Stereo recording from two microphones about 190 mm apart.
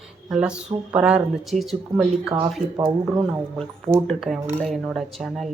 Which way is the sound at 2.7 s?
20° right (ahead or behind).